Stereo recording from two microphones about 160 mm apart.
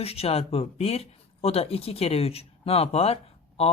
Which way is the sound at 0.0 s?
40° left (ahead or behind).